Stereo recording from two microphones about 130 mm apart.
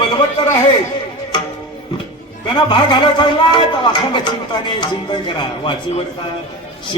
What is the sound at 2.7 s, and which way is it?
Speech, 35° left (ahead or behind).